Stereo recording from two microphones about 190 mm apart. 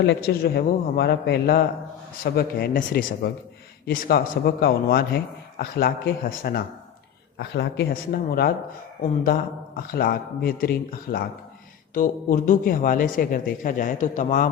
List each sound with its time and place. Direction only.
0.0 s a man's voice: 60° left (ahead or behind); by 14.4 s 40° left (ahead or behind)